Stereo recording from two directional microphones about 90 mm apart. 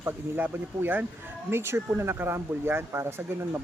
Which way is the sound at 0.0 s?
25° right (ahead or behind).